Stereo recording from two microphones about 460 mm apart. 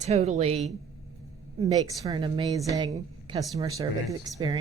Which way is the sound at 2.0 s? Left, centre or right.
Centre.